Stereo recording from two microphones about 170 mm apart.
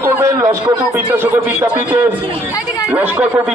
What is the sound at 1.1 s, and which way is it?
A man's voice, 10° right (ahead or behind).